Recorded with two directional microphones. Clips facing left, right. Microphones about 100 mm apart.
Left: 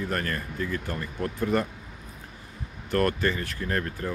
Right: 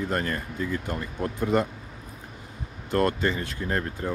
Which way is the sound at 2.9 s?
20° right (ahead or behind).